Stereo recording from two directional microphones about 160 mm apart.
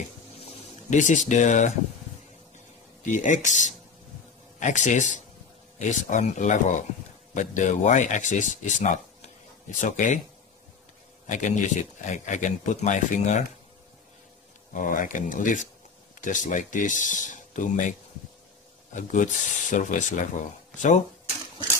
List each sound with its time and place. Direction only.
0.5 s speech: 50° left (ahead or behind)
3.0 s speech: 50° left (ahead or behind)
11.2 s speech: 50° left (ahead or behind)
14.7 s speech: 55° left (ahead or behind)
18.9 s speech: 50° left (ahead or behind)